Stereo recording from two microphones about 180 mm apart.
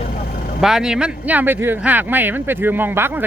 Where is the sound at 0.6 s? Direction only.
5° right (ahead or behind).